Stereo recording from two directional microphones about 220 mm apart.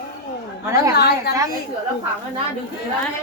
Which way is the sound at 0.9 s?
45° left (ahead or behind).